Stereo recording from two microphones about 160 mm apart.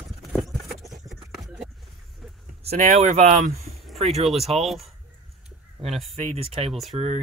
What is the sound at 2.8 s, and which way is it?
Speech, 50° right (ahead or behind).